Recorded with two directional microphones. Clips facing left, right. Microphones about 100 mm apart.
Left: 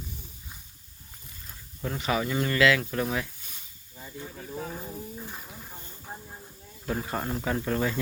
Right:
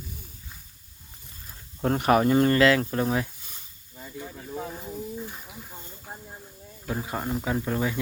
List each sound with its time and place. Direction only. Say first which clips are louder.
1.8 s speech: right 8 dB; 55° right (ahead or behind); by 3.2 s 30° right (ahead or behind)
4.2 s speech: right 2 dB; 10° right (ahead or behind)
6.8 s speech: even; 10° right (ahead or behind)